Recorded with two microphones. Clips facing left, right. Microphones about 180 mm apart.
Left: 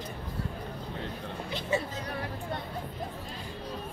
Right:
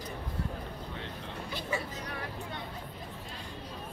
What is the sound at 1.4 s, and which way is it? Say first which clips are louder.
Music: left 5 dB; 20° left (ahead or behind).